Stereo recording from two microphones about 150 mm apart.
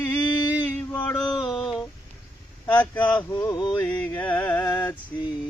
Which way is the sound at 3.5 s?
30° left (ahead or behind).